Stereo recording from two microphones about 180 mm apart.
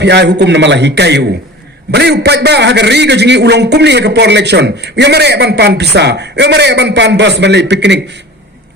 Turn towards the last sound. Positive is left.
turn(degrees=-75)  # may be behind; listen again after turning